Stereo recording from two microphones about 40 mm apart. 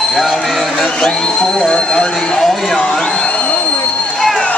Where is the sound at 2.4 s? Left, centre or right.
Centre.